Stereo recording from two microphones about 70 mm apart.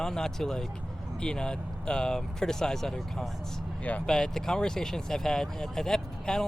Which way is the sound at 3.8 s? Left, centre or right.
Left.